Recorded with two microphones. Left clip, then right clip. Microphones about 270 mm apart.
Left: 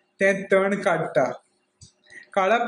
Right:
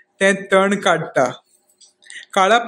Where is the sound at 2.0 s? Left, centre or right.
Right.